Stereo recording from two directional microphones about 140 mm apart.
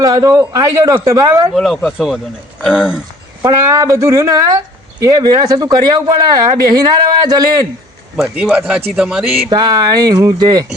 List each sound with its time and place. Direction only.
0.0 s speech: 25° right (ahead or behind)
1.5 s a man's voice: centre (ahead or behind)
3.6 s speech: 25° right (ahead or behind)
8.1 s a man's voice: 5° right (ahead or behind)
9.5 s speech: 30° right (ahead or behind)